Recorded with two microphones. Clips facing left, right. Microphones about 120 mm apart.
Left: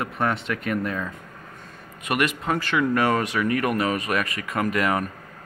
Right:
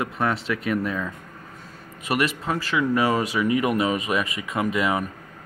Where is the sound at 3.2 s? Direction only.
15° right (ahead or behind).